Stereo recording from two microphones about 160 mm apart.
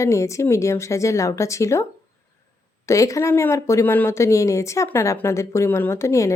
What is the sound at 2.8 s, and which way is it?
A woman's voice, 20° left (ahead or behind).